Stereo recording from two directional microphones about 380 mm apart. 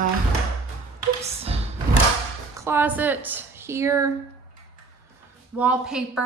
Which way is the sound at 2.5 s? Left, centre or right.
Centre.